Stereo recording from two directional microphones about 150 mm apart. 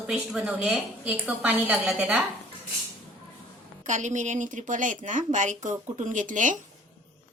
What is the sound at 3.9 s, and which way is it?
A woman's voice, 55° right (ahead or behind).